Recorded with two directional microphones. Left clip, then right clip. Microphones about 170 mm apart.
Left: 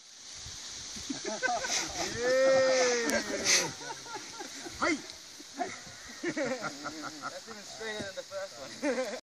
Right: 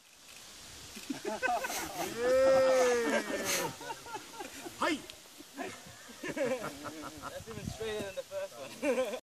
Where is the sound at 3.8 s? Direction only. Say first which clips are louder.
Left 1 dB; 20° left (ahead or behind).